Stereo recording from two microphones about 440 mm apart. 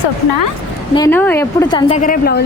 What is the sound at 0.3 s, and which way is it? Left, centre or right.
Speech, left.